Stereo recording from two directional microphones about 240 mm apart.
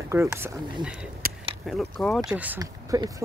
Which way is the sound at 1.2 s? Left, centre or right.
Right.